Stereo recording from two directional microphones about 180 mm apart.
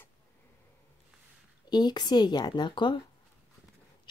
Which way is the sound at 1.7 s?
25° left (ahead or behind).